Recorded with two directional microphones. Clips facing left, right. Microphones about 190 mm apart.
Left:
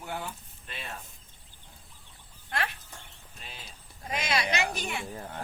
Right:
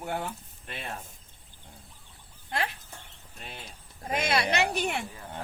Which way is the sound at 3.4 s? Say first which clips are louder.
Right 4 dB; 60° right (ahead or behind).